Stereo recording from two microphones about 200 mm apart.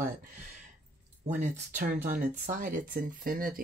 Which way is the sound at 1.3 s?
40° right (ahead or behind).